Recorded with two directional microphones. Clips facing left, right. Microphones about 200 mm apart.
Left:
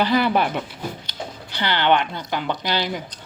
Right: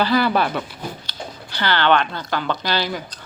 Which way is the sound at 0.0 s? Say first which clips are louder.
Right 1 dB; 20° left (ahead or behind).